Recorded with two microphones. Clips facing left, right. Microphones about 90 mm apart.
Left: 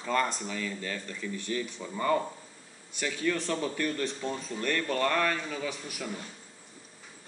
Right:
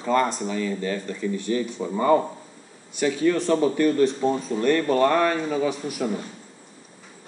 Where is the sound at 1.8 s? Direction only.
25° right (ahead or behind).